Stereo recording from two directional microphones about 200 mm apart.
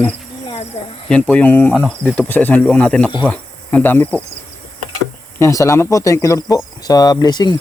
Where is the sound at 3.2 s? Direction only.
5° left (ahead or behind).